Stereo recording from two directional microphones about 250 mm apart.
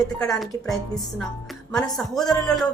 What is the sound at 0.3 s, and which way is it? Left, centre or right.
A woman's voice, centre.